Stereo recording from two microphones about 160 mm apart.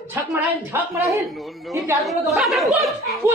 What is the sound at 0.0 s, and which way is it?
Speech, 15° right (ahead or behind).